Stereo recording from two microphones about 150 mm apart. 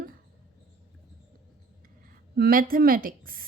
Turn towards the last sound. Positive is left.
turn(degrees=-75)  # may be behind; listen again after turning